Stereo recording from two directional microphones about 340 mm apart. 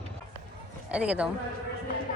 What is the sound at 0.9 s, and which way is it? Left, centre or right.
Speech, centre.